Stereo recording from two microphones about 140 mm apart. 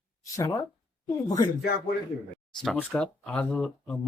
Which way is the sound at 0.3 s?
25° left (ahead or behind).